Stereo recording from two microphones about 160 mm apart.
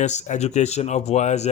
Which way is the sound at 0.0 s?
45° left (ahead or behind).